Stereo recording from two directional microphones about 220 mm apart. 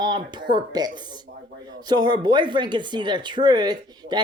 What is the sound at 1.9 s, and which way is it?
Speech, 20° right (ahead or behind).